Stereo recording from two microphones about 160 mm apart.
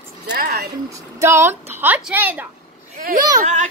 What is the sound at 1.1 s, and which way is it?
A child's voice, 15° right (ahead or behind).